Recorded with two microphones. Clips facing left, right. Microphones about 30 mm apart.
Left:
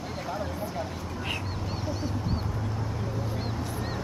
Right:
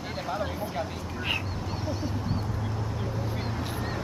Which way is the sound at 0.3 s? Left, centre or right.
Centre.